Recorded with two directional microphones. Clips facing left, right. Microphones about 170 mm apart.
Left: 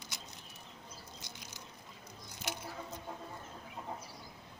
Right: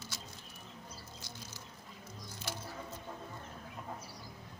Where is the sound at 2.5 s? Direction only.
20° left (ahead or behind).